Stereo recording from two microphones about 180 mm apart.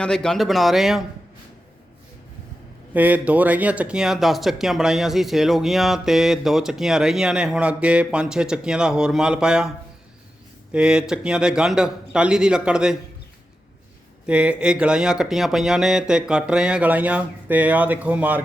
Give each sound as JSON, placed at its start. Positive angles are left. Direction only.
{"t": 0.0, "sound": "speech", "side_deg": 5}
{"t": 2.9, "sound": "speech", "side_deg": -10}
{"t": 14.3, "sound": "speech", "side_deg": -5}